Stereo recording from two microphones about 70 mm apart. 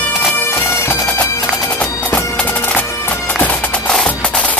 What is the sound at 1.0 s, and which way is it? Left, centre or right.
Bagpipes, centre.